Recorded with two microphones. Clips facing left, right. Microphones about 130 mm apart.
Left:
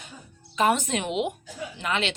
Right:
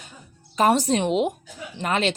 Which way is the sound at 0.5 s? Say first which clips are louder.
Right 4 dB; 40° right (ahead or behind).